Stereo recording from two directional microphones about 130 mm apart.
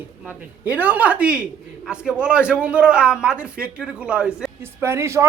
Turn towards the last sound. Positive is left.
turn(degrees=-20)  # may be behind; listen again after turning